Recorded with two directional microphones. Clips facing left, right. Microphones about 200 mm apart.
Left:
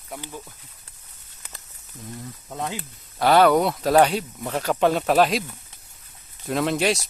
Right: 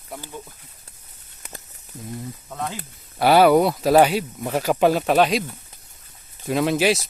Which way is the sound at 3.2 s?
10° right (ahead or behind).